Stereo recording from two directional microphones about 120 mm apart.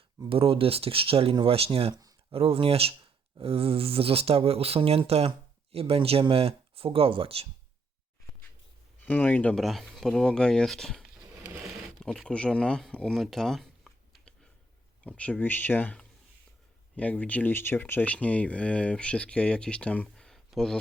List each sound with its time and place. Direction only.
0.3 s speech: 50° right (ahead or behind)
1.9 s speech: 30° right (ahead or behind)
2.3 s speech: 50° right (ahead or behind)
9.0 s speech: 15° left (ahead or behind)
11.6 s a sound: centre (ahead or behind)
15.0 s speech: 10° left (ahead or behind)